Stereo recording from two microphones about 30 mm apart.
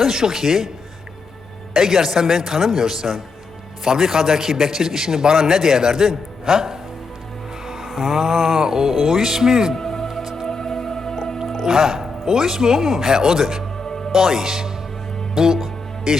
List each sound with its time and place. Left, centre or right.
0.0 s a man's voice: centre
1.7 s a man's voice: centre
7.9 s a man's voice: centre
8.9 s a man's voice: centre
9.7 s music: centre
11.6 s a man's voice: centre
13.8 s music: left
14.1 s a man's voice: centre